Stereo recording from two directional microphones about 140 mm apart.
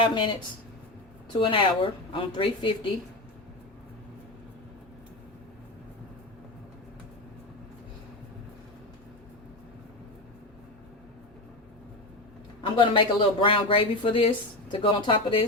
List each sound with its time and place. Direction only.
0.0 s speech: 35° left (ahead or behind)
12.6 s a man's voice: 35° left (ahead or behind)